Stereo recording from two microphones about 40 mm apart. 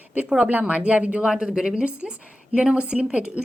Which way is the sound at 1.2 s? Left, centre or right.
Right.